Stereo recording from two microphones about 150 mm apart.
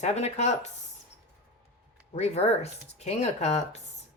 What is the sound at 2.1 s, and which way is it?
Speech, 45° left (ahead or behind).